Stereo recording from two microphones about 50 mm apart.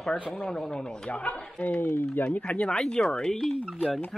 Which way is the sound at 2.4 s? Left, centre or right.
Left.